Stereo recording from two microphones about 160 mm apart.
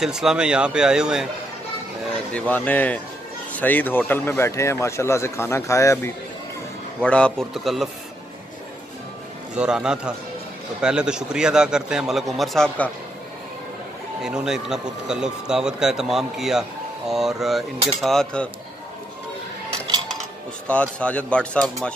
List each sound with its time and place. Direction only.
0.0 s speech: 5° right (ahead or behind)
2.3 s speech: 10° left (ahead or behind)
7.0 s speech: 10° left (ahead or behind)
9.6 s speech: 5° right (ahead or behind)
14.2 s speech: 5° right (ahead or behind)
20.6 s speech: 5° left (ahead or behind)